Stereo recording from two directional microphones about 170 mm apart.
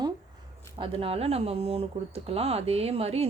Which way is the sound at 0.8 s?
35° right (ahead or behind).